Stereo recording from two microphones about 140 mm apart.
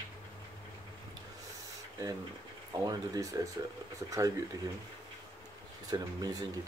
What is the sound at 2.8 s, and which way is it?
Speech, 25° right (ahead or behind).